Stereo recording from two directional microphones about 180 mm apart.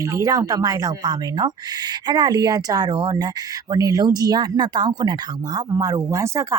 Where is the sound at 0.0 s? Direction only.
20° right (ahead or behind).